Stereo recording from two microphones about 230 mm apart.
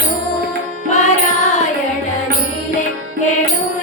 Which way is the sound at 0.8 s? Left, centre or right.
Left.